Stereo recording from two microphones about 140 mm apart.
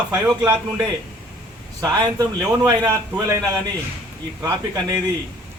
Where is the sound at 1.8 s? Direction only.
25° right (ahead or behind).